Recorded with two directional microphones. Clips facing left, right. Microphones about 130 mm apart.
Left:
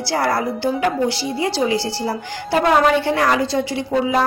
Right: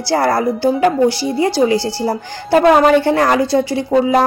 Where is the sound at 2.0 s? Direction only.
45° right (ahead or behind).